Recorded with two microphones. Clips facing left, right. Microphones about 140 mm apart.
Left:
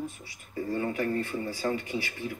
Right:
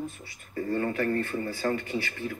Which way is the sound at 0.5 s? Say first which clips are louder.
Right 2 dB; 10° left (ahead or behind).